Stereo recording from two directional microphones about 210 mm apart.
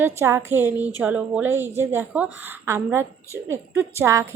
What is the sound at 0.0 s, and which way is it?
A woman's voice, 10° right (ahead or behind).